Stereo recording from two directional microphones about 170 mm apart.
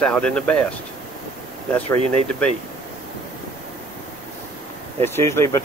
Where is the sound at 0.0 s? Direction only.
5° left (ahead or behind).